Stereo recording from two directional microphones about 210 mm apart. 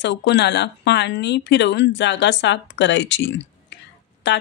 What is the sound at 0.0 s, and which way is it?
Speech, 55° left (ahead or behind).